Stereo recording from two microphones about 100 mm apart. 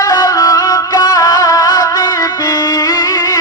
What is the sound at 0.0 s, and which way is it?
Music, 40° left (ahead or behind).